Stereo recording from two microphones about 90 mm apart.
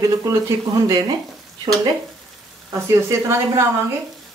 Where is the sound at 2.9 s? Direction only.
30° right (ahead or behind).